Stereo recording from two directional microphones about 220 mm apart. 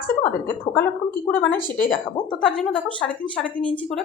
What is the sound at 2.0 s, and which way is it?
Speech, 20° left (ahead or behind).